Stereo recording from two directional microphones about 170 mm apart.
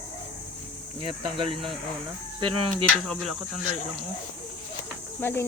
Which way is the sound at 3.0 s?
5° left (ahead or behind).